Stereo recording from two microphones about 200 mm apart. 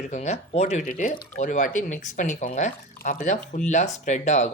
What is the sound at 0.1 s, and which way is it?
Speech, 35° left (ahead or behind).